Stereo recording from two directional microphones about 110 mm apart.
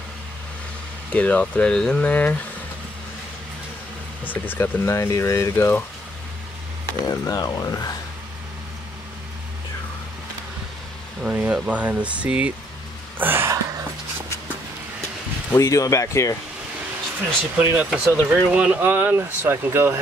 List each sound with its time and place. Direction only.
1.1 s speech: 10° left (ahead or behind)
4.2 s speech: 15° left (ahead or behind)
7.1 s speech: 35° left (ahead or behind)
11.2 s speech: 10° right (ahead or behind)
15.5 s speech: 30° left (ahead or behind)
17.6 s speech: 15° right (ahead or behind)